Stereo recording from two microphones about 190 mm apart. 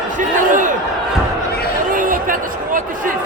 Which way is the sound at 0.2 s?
45° right (ahead or behind).